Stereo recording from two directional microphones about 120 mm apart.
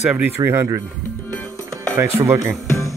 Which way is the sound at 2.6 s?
25° left (ahead or behind).